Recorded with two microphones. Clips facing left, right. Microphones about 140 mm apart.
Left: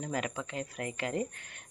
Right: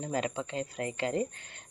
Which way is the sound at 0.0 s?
30° right (ahead or behind).